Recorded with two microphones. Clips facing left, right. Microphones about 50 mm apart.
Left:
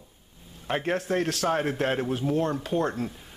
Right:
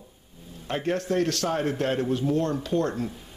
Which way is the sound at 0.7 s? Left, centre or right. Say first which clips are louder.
Even; centre.